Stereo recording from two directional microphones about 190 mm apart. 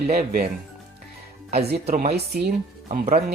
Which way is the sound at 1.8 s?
50° right (ahead or behind).